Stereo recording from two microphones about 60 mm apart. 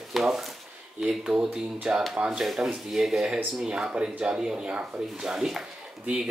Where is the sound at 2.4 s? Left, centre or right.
Centre.